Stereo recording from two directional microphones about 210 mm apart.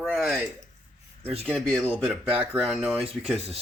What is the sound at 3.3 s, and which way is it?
Speech, 30° right (ahead or behind).